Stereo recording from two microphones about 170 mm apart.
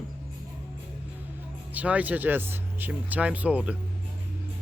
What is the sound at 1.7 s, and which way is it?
Speech, 10° right (ahead or behind).